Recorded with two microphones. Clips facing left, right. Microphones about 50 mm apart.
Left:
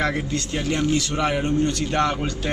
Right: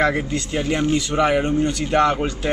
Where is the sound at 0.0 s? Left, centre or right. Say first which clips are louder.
Right 4 dB; centre.